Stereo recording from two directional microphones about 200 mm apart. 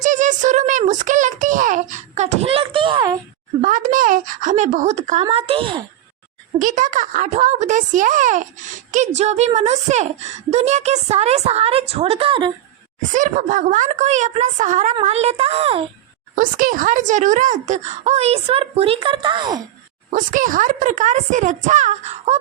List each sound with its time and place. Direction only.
0.0 s a sound: 40° right (ahead or behind); by 3.2 s 20° right (ahead or behind)
3.6 s a child's voice: 40° right (ahead or behind)
6.6 s speech: 40° right (ahead or behind)
13.0 s speech: 40° right (ahead or behind)
16.3 s speech: 45° right (ahead or behind); by 19.6 s 20° right (ahead or behind)
20.1 s speech: 40° right (ahead or behind)